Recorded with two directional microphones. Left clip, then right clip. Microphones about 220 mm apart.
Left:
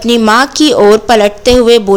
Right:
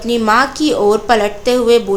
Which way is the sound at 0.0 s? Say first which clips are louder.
Left 4 dB; 35° left (ahead or behind).